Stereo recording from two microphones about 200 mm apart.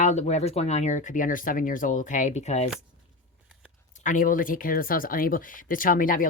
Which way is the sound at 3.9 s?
40° left (ahead or behind).